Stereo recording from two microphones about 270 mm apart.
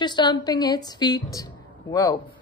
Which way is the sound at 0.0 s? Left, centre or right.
Centre.